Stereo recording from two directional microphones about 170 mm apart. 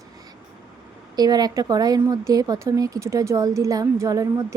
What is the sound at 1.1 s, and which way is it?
Speech, 25° right (ahead or behind).